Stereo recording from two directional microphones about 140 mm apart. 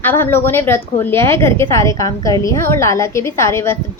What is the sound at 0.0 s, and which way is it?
A woman's voice, 15° left (ahead or behind).